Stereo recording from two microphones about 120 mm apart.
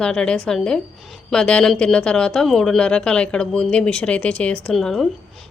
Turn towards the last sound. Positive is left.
turn(degrees=0)  # may be behind; listen again after turning